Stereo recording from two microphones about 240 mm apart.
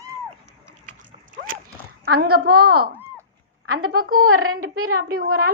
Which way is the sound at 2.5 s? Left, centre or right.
Right.